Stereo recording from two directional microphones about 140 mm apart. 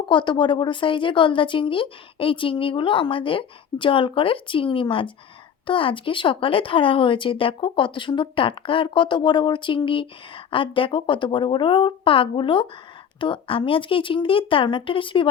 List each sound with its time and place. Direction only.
0.1 s speech: 35° left (ahead or behind)